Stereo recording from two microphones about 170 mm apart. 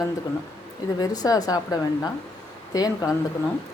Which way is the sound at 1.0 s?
20° left (ahead or behind).